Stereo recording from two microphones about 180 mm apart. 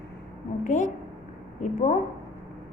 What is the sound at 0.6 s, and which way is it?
Speech, 40° left (ahead or behind).